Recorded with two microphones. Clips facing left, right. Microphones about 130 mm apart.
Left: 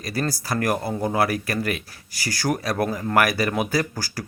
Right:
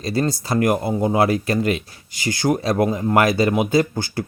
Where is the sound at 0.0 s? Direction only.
25° right (ahead or behind).